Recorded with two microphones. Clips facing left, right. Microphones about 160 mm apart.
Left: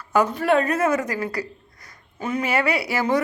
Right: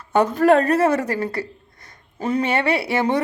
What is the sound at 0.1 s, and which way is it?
A woman's voice, 35° right (ahead or behind).